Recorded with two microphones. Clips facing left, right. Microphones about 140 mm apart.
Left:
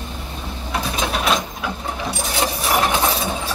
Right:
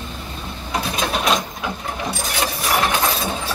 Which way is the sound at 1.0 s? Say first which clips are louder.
Even; centre (ahead or behind).